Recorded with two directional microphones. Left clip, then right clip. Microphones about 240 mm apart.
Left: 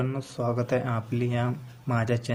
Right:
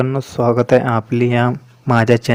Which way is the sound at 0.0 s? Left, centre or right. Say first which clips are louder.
Right 13 dB; right.